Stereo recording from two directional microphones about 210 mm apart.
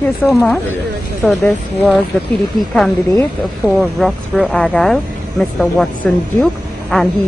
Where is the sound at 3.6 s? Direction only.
5° right (ahead or behind).